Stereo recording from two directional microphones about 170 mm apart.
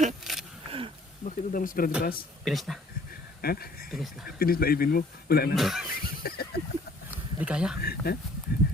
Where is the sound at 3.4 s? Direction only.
65° left (ahead or behind).